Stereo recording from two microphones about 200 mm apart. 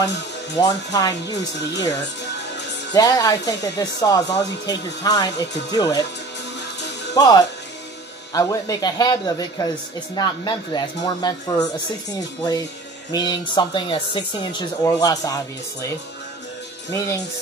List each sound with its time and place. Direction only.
0.6 s speech: 20° left (ahead or behind)
2.9 s speech: 20° left (ahead or behind)
7.2 s speech: 20° left (ahead or behind)